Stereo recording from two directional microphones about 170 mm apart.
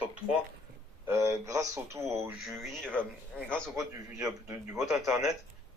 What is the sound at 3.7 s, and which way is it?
A man's voice, 20° right (ahead or behind).